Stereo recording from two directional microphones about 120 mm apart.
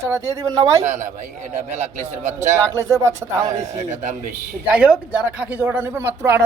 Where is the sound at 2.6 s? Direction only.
25° right (ahead or behind).